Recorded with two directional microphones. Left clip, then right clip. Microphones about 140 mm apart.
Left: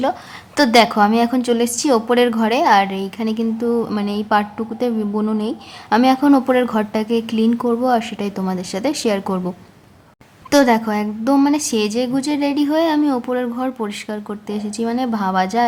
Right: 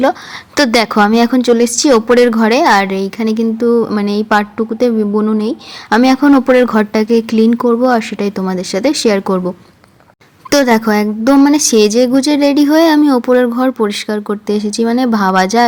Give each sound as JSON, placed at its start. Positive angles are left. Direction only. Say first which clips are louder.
{"t": 0.0, "sound": "a woman's voice", "louder": "right 7 dB", "side_deg": -30}
{"t": 10.5, "sound": "speech", "louder": "right 4 dB", "side_deg": -35}